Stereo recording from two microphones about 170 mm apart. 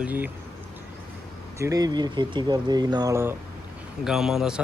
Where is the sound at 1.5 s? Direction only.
20° right (ahead or behind).